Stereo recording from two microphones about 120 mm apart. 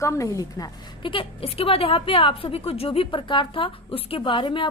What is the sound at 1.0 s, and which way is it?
A woman's voice, 45° left (ahead or behind).